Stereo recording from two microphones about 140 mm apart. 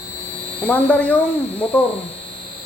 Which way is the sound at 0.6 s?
10° left (ahead or behind).